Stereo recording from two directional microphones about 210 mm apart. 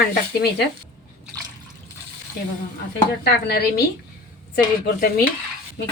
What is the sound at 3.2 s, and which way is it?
Speech, 50° left (ahead or behind).